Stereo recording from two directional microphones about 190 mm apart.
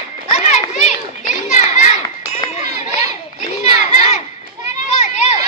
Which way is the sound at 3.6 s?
35° left (ahead or behind).